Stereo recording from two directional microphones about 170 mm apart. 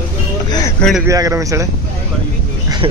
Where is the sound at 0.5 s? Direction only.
20° left (ahead or behind).